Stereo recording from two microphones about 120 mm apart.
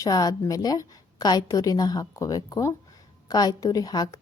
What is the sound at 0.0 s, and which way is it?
A woman's voice, 30° left (ahead or behind).